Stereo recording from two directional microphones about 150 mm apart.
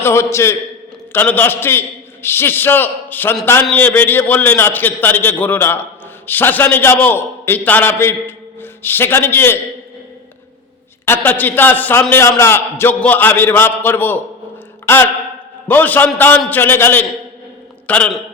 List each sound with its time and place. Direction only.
0.0 s a man's voice: 20° left (ahead or behind)
11.0 s a man's voice: 15° left (ahead or behind)